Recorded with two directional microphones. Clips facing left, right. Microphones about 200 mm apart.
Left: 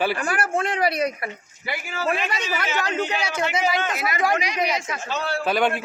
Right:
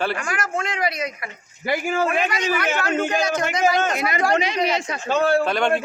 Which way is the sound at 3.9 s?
25° right (ahead or behind).